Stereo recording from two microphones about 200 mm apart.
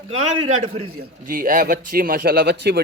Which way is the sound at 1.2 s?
45° right (ahead or behind).